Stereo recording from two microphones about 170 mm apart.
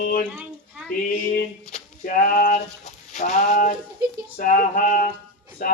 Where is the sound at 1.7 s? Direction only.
50° left (ahead or behind).